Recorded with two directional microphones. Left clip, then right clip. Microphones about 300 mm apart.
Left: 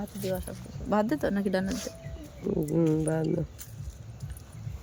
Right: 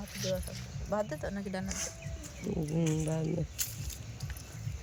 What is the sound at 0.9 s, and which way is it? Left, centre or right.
Speech, left.